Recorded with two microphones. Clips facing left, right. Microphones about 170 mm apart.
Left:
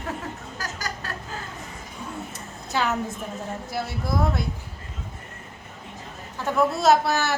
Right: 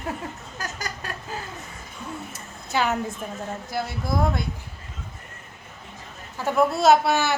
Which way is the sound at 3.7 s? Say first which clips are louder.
Right 1 dB; centre (ahead or behind).